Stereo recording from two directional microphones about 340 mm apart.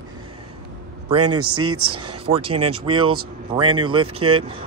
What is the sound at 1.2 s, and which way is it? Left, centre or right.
Speech, right.